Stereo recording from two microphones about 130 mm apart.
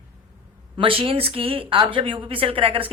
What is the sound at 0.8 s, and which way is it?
A woman's voice, 45° right (ahead or behind).